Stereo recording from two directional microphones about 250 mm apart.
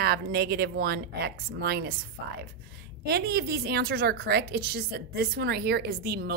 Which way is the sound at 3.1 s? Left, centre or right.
Right.